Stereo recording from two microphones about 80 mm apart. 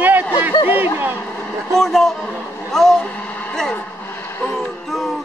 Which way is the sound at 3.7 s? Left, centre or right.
Left.